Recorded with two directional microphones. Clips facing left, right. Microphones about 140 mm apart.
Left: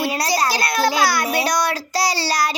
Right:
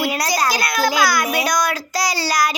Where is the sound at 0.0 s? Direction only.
30° left (ahead or behind).